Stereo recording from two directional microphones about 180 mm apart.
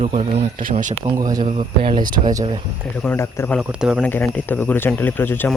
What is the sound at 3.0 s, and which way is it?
Speech, 10° left (ahead or behind).